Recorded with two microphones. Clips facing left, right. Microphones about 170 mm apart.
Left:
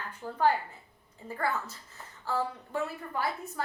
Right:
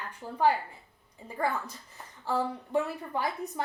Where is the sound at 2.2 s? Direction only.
15° right (ahead or behind).